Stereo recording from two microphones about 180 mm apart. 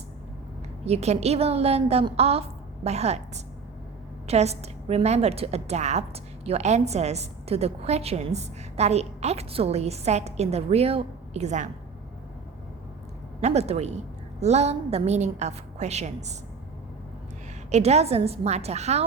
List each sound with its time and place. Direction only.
0.9 s a woman's voice: 35° right (ahead or behind)
13.4 s a woman's voice: 35° right (ahead or behind)
17.7 s a woman's voice: 35° right (ahead or behind)